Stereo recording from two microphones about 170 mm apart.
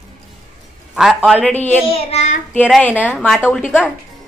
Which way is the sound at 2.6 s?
5° left (ahead or behind).